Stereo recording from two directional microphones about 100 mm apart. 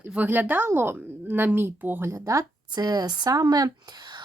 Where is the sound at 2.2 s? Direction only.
35° right (ahead or behind).